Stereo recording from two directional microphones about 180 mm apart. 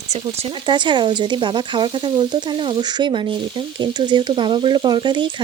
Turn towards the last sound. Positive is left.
turn(degrees=-25)  # may be behind; listen again after turning